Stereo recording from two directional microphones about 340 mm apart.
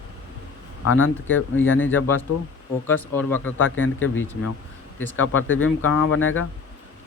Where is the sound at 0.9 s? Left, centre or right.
Left.